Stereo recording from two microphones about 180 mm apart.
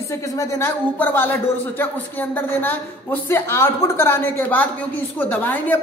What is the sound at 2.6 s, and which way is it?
A woman's voice, 10° left (ahead or behind).